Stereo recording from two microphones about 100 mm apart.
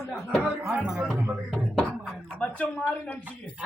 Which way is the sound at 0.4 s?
20° right (ahead or behind).